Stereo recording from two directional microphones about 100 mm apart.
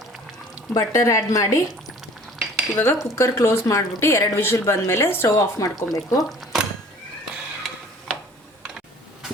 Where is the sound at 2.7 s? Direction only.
25° left (ahead or behind).